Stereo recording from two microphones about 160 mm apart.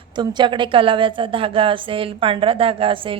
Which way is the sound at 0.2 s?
30° right (ahead or behind).